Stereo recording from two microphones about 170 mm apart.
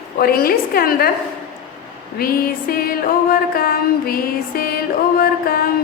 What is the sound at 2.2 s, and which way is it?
Music, 60° left (ahead or behind).